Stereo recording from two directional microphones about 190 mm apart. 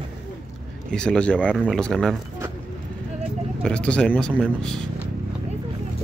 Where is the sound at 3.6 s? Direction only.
5° left (ahead or behind).